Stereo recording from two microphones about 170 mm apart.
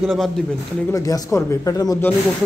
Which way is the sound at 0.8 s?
20° left (ahead or behind).